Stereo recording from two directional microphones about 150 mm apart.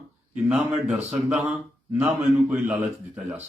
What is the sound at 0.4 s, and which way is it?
Speech, 5° right (ahead or behind).